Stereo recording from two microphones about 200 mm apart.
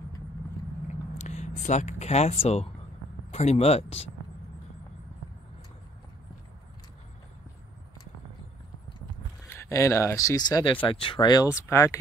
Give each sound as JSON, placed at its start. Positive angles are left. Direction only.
{"t": 1.1, "sound": "speech", "side_deg": 35}
{"t": 9.5, "sound": "speech", "side_deg": 15}